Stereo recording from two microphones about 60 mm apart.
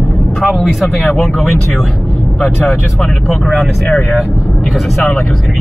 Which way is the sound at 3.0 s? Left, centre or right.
Centre.